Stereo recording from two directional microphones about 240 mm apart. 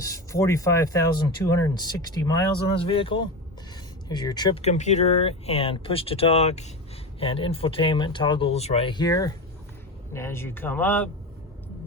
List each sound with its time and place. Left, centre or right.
0.0 s speech: centre